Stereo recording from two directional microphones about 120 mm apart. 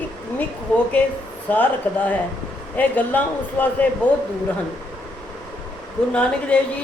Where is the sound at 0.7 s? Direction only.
10° left (ahead or behind).